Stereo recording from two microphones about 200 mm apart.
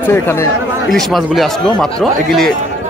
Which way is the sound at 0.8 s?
Centre (ahead or behind).